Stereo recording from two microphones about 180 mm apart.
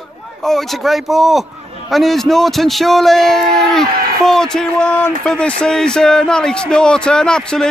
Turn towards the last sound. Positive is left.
turn(degrees=5)  # may be behind; listen again after turning